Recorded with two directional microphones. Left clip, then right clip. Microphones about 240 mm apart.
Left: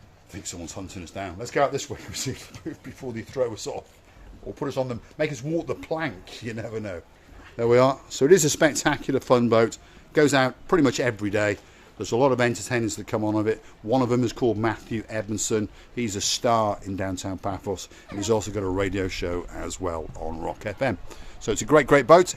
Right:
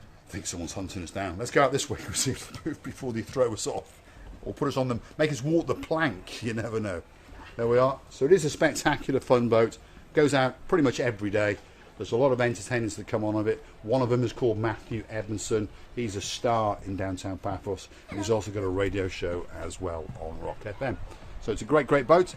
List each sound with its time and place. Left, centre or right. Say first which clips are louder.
0.3 s speech: right 1 dB; centre
7.7 s speech: left 4 dB; left
8.2 s speech: left 4 dB; left